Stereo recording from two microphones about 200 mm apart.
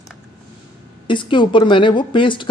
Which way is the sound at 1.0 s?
25° left (ahead or behind).